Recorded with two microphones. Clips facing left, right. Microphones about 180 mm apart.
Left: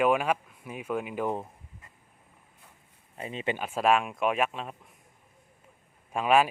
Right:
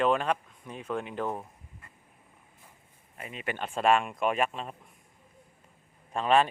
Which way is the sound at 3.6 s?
5° left (ahead or behind).